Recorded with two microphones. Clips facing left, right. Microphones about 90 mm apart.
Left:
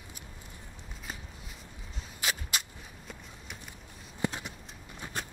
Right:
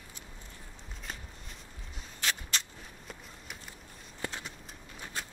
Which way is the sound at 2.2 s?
10° left (ahead or behind).